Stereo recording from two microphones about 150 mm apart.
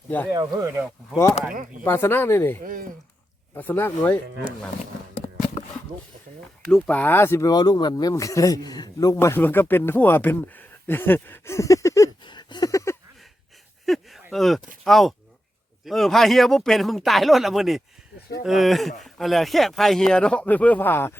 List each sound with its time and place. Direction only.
0.3 s speech: 25° right (ahead or behind)
1.8 s speech: 15° left (ahead or behind)
6.7 s speech: 5° left (ahead or behind); by 9.1 s 25° left (ahead or behind)
9.1 s speech: 15° left (ahead or behind)
13.8 s a sound: centre (ahead or behind)
14.8 s speech: centre (ahead or behind)